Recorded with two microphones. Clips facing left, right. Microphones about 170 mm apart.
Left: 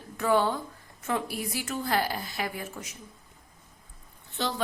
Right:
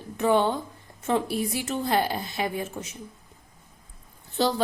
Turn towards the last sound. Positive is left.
turn(degrees=-35)  # may be behind; listen again after turning